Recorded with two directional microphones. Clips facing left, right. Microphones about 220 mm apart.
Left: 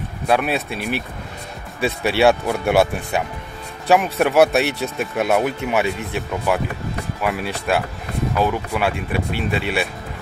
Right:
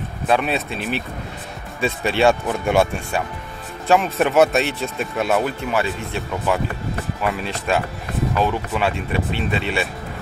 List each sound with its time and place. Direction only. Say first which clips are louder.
0.3 s speech: left 1 dB; 10° left (ahead or behind)